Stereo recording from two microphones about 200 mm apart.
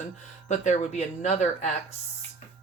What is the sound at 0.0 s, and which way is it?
Speech, 35° left (ahead or behind).